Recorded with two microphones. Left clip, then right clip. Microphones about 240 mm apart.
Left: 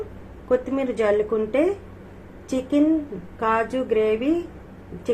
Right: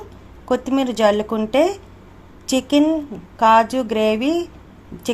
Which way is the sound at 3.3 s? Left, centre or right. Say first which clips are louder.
Right 9 dB; right.